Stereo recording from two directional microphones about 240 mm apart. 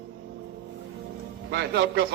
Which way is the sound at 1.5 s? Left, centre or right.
Right.